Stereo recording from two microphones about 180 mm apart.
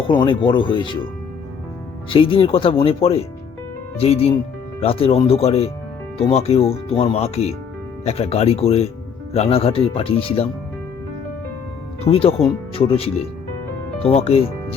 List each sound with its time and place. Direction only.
0.2 s speech: 30° left (ahead or behind)
2.0 s speech: 30° left (ahead or behind)
12.0 s speech: 30° left (ahead or behind)